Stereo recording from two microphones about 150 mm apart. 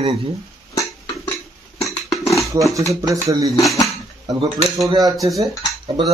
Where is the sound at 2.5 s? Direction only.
20° right (ahead or behind).